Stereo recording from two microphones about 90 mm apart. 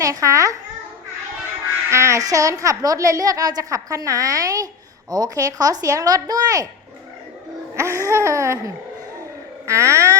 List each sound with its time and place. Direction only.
0.0 s a woman's voice: 35° right (ahead or behind)
1.9 s a woman's voice: 30° right (ahead or behind)
7.8 s a woman's voice: 35° right (ahead or behind)